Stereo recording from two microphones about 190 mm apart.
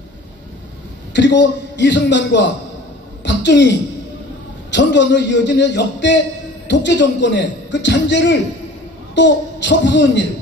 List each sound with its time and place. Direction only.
1.1 s a man's voice: 70° left (ahead or behind)
4.7 s a man's voice: 70° left (ahead or behind)